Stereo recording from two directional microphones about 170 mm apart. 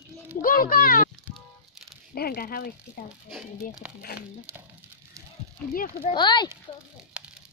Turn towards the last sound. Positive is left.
turn(degrees=-5)  # may be behind; listen again after turning